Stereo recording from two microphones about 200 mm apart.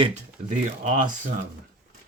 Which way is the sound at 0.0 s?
35° right (ahead or behind).